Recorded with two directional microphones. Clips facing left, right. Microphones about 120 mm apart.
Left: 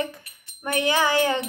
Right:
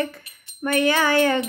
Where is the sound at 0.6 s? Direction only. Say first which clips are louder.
Right 3 dB; 20° left (ahead or behind).